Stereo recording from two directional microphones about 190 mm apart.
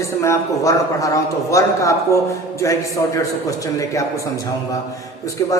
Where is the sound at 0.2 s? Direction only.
15° left (ahead or behind).